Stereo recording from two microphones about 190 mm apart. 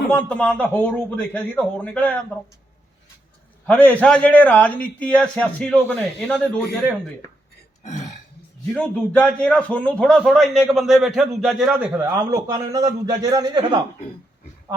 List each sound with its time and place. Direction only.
0.1 s a man's voice: 5° left (ahead or behind)
3.7 s a man's voice: 10° left (ahead or behind)
7.9 s burping: 40° left (ahead or behind)
8.7 s a man's voice: 5° left (ahead or behind); by 13.7 s 25° right (ahead or behind)